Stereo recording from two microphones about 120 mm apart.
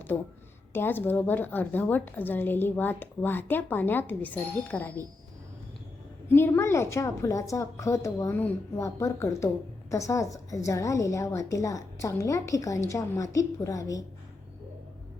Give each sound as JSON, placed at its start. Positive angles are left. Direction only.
{"t": 0.1, "sound": "a woman's voice", "side_deg": 20}
{"t": 6.3, "sound": "a woman's voice", "side_deg": 20}